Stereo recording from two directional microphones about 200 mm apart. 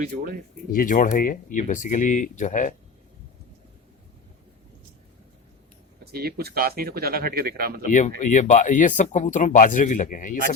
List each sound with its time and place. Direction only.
0.7 s speech: 45° left (ahead or behind)
6.1 s speech: 50° right (ahead or behind)
7.9 s speech: 40° left (ahead or behind)